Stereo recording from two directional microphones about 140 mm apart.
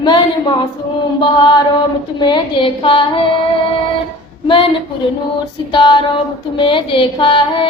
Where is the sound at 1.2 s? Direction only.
30° left (ahead or behind).